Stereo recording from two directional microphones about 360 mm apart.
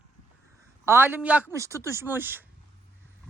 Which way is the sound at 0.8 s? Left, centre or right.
Centre.